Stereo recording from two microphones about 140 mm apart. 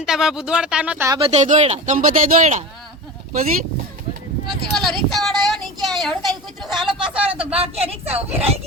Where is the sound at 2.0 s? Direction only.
65° right (ahead or behind).